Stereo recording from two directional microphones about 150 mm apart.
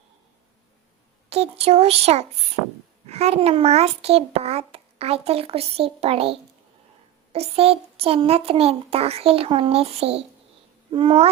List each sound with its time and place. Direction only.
1.3 s a child's voice: 45° right (ahead or behind)
7.3 s a child's voice: 40° right (ahead or behind)